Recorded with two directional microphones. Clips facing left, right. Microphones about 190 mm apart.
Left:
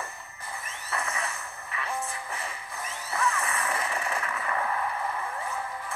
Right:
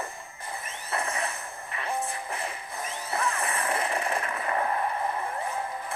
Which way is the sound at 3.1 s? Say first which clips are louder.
Even; 35° right (ahead or behind).